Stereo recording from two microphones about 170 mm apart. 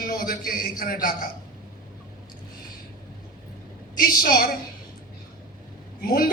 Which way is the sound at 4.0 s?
60° left (ahead or behind).